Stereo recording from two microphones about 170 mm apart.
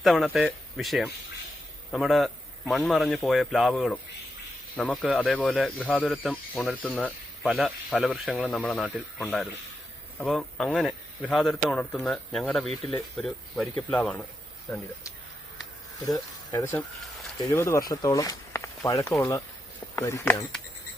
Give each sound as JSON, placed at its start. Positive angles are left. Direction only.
{"t": 0.0, "sound": "speech", "side_deg": 0}
{"t": 10.2, "sound": "speech", "side_deg": 0}
{"t": 16.0, "sound": "speech", "side_deg": 20}